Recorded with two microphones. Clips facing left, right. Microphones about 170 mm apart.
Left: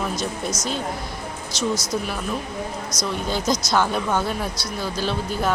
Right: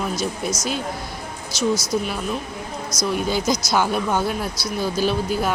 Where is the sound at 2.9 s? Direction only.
20° left (ahead or behind).